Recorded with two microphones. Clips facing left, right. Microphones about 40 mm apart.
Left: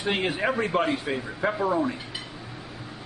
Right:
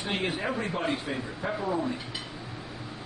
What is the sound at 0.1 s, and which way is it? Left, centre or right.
Speech, left.